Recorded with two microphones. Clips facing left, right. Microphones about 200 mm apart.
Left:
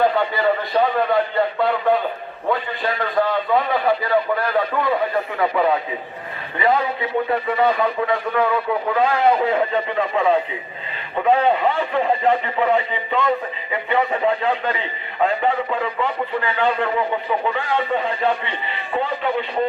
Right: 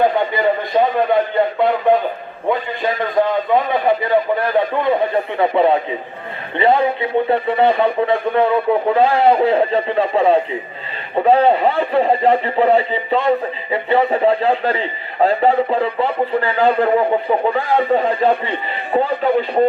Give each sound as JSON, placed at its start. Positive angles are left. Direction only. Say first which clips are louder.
{"t": 0.0, "sound": "a man's voice", "louder": "right 3 dB", "side_deg": -20}